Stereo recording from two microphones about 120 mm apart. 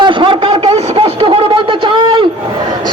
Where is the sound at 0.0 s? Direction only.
45° right (ahead or behind).